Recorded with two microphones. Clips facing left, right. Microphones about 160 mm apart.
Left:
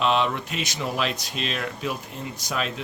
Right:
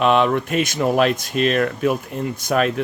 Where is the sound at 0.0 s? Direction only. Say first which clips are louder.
Right 7 dB; 55° right (ahead or behind).